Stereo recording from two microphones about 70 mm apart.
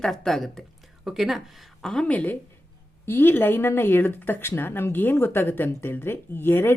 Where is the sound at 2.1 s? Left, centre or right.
Left.